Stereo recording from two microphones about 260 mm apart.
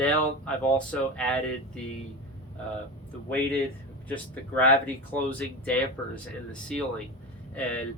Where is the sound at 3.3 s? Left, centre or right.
Centre.